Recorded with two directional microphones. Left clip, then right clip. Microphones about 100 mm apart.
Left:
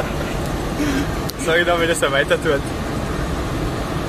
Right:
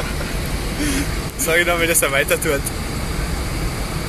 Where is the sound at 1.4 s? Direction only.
5° right (ahead or behind).